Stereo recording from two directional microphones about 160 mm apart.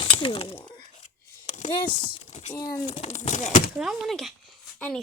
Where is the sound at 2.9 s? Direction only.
45° left (ahead or behind).